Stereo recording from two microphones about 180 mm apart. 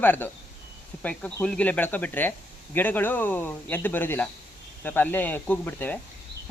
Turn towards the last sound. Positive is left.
turn(degrees=10)  # may be behind; listen again after turning